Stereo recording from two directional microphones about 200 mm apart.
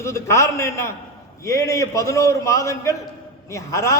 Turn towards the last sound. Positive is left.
turn(degrees=15)  # may be behind; listen again after turning